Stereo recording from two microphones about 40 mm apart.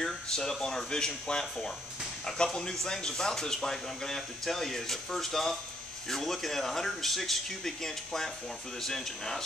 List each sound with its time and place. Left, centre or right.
0.0 s speech: centre